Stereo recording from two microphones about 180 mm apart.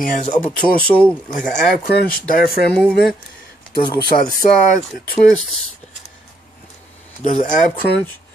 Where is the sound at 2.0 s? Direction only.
55° left (ahead or behind).